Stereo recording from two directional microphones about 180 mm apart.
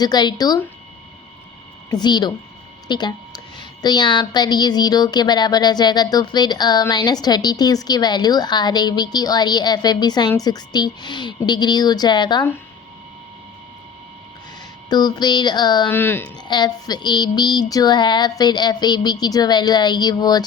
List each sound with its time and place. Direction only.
0.0 s a woman's voice: 25° left (ahead or behind)
1.9 s a woman's voice: 25° left (ahead or behind)
14.8 s a woman's voice: 20° left (ahead or behind)
15.9 s speech: 10° left (ahead or behind)
16.5 s a woman's voice: 25° left (ahead or behind)